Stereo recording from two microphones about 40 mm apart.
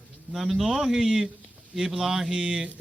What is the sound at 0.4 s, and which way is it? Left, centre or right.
A man's voice, centre.